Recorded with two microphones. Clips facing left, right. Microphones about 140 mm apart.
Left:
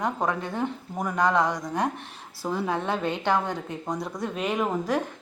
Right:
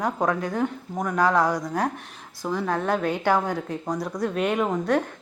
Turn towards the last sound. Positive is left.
turn(degrees=0)  # may be behind; listen again after turning